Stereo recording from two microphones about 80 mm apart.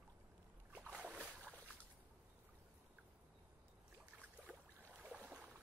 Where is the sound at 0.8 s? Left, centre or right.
Centre.